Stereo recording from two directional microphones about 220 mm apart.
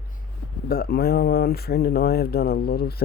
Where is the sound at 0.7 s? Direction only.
40° left (ahead or behind).